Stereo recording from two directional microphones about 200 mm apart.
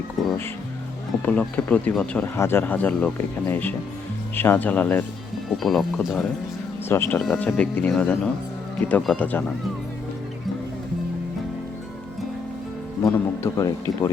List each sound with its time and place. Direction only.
0.2 s music: centre (ahead or behind)
1.2 s speech: 5° left (ahead or behind)
6.8 s speech: 10° left (ahead or behind)
13.0 s speech: 15° left (ahead or behind)